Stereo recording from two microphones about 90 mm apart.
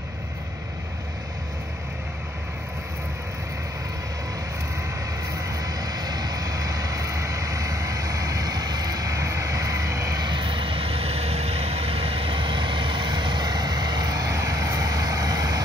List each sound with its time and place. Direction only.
5.3 s vehicle: 40° right (ahead or behind)
10.2 s vehicle: 60° right (ahead or behind); by 15.6 s 45° right (ahead or behind)